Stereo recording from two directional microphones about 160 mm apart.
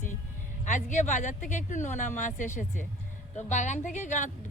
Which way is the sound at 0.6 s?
50° left (ahead or behind).